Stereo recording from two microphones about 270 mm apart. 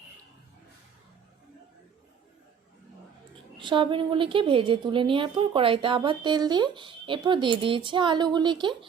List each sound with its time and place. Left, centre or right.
3.6 s a woman's voice: centre